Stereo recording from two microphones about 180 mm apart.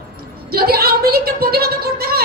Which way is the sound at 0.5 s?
60° right (ahead or behind).